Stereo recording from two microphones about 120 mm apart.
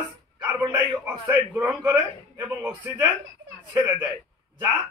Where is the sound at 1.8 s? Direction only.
25° right (ahead or behind).